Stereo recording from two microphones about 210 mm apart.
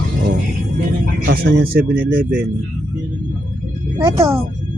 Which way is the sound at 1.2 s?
50° right (ahead or behind).